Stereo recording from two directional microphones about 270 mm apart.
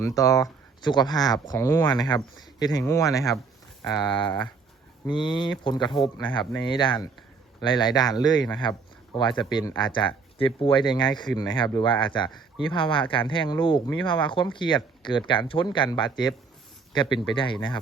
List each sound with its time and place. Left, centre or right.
0.2 s speech: centre